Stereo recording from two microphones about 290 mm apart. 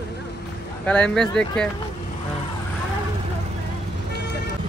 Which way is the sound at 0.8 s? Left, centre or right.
Centre.